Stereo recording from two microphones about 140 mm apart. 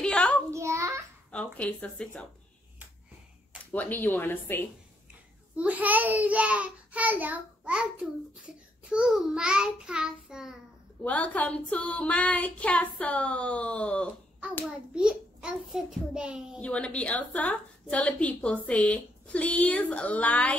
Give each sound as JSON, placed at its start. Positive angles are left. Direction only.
{"t": 0.0, "sound": "child singing", "side_deg": 5}
{"t": 0.5, "sound": "child singing", "side_deg": -20}
{"t": 1.3, "sound": "a woman's voice", "side_deg": 10}
{"t": 3.7, "sound": "a woman's voice", "side_deg": 10}
{"t": 5.6, "sound": "a child's voice", "side_deg": -10}
{"t": 11.0, "sound": "a woman's voice", "side_deg": 10}
{"t": 15.0, "sound": "a child's voice", "side_deg": -5}
{"t": 16.5, "sound": "a woman's voice", "side_deg": 10}